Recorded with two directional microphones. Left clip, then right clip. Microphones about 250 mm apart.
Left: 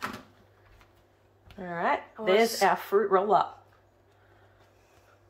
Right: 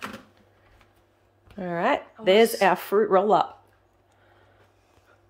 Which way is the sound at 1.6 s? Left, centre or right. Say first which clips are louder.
Right 4 dB; right.